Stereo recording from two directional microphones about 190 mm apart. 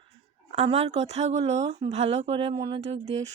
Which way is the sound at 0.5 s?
35° right (ahead or behind).